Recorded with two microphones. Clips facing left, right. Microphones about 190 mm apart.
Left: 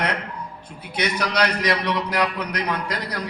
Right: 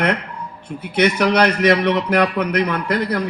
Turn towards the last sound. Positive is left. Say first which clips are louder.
# right 8 dB
turn(degrees=-55)  # may be behind; listen again after turning